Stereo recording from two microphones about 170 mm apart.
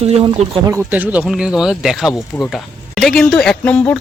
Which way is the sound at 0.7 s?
15° right (ahead or behind).